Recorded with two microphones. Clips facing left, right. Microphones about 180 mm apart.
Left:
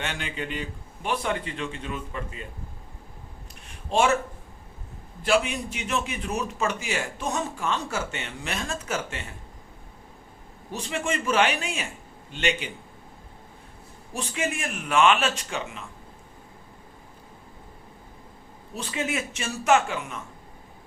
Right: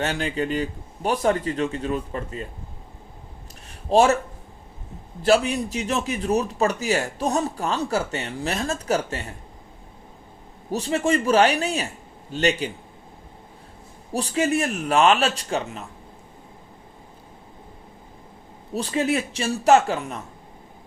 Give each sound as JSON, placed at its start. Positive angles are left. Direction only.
{"t": 0.0, "sound": "speech", "side_deg": -35}
{"t": 3.8, "sound": "speech", "side_deg": -35}
{"t": 5.2, "sound": "speech", "side_deg": -35}
{"t": 10.7, "sound": "speech", "side_deg": -35}
{"t": 14.1, "sound": "speech", "side_deg": -35}
{"t": 18.7, "sound": "speech", "side_deg": -35}